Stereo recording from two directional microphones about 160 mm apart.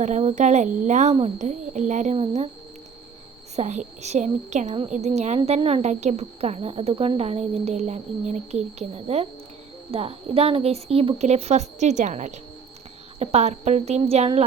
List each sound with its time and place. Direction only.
0.0 s a woman's voice: 45° right (ahead or behind)
2.1 s a woman's voice: 40° right (ahead or behind)
3.5 s a woman's voice: 45° right (ahead or behind)